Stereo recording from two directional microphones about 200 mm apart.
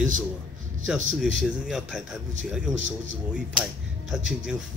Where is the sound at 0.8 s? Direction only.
Centre (ahead or behind).